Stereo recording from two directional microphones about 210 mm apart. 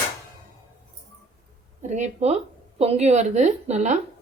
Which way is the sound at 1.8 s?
35° right (ahead or behind).